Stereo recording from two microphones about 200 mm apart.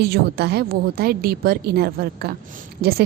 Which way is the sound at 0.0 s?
50° right (ahead or behind).